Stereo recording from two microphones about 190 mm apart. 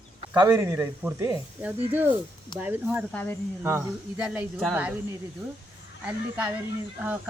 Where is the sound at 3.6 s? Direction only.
15° right (ahead or behind).